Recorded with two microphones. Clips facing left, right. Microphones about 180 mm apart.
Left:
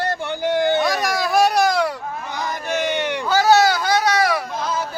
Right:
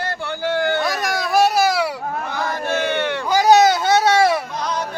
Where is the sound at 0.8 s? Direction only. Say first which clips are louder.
Left 2 dB; centre (ahead or behind).